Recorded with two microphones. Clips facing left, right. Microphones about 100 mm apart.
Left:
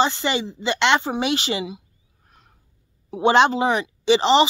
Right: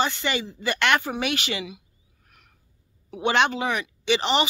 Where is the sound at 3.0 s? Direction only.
30° left (ahead or behind).